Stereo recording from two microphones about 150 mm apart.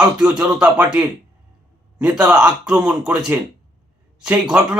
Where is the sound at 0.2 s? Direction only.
5° right (ahead or behind).